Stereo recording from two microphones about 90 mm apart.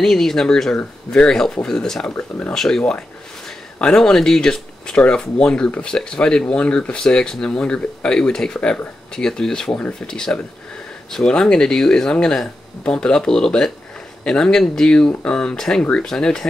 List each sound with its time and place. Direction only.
0.0 s speech: 5° left (ahead or behind)